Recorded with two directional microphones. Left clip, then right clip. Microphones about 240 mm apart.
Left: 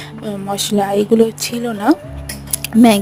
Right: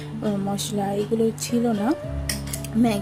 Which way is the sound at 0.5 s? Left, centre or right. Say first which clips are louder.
Left 10 dB; left.